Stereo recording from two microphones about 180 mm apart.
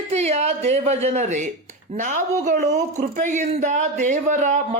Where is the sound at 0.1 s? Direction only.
35° right (ahead or behind).